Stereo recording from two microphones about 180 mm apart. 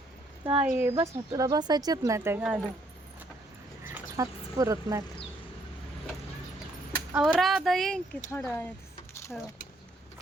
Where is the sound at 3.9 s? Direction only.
20° right (ahead or behind).